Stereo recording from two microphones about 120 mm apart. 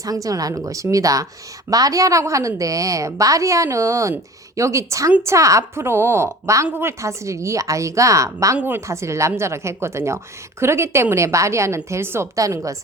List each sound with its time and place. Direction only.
0.0 s a woman's voice: 30° right (ahead or behind)